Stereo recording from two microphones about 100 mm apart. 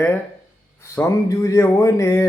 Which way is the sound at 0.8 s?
30° left (ahead or behind).